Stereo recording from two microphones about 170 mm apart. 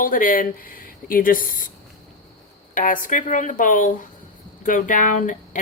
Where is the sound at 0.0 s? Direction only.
55° left (ahead or behind).